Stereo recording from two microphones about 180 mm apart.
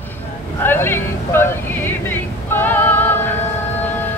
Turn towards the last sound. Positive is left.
turn(degrees=10)  # may be behind; listen again after turning